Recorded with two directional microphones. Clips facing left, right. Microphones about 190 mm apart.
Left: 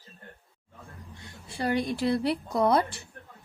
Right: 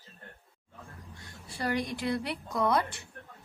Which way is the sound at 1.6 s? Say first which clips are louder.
Left 4 dB; 30° left (ahead or behind).